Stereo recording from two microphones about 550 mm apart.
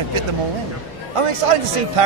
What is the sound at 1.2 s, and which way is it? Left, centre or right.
Speech, right.